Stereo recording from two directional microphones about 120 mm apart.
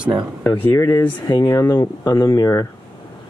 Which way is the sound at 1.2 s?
40° left (ahead or behind).